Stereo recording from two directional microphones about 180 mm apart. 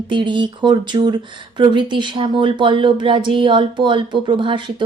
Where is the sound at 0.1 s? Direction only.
25° right (ahead or behind).